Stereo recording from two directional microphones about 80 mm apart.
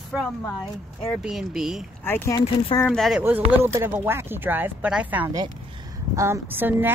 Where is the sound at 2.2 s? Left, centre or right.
Left.